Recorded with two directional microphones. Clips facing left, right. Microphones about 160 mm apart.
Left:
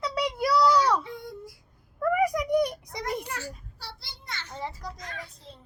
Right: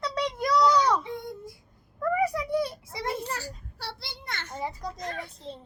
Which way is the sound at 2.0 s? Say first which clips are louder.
Left 2 dB; 10° left (ahead or behind).